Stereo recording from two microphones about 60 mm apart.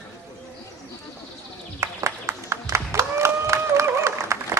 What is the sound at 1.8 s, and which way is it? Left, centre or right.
Applause, right.